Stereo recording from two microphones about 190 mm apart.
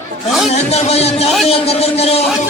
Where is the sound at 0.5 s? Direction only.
35° left (ahead or behind).